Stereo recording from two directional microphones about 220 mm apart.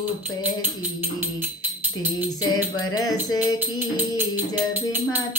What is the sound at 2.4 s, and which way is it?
Music, 15° left (ahead or behind).